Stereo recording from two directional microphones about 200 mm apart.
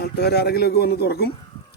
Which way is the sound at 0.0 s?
50° left (ahead or behind).